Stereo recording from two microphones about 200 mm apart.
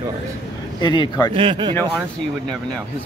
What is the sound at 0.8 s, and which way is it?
Speech, 20° left (ahead or behind).